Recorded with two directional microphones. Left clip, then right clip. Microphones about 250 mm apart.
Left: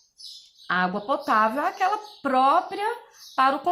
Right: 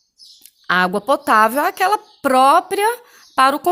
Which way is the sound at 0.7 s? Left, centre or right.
Right.